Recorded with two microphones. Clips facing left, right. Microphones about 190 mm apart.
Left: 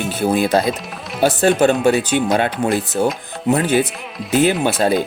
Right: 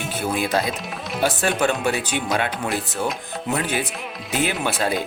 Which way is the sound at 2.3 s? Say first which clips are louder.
Left 6 dB; 35° left (ahead or behind).